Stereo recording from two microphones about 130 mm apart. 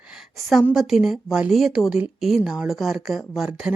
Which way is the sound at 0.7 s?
5° right (ahead or behind).